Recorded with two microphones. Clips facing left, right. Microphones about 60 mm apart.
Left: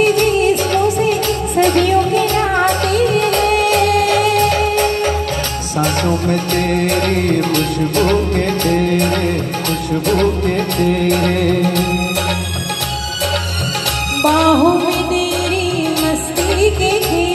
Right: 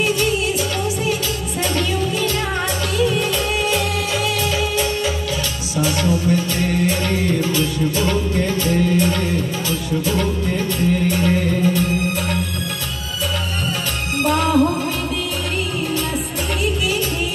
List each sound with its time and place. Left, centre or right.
0.0 s music: left
14.2 s music: left
16.5 s music: left